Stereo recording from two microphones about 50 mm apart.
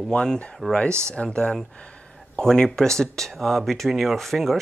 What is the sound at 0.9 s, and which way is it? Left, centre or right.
Speech, right.